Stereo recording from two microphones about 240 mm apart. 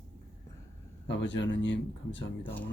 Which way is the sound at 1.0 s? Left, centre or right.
Left.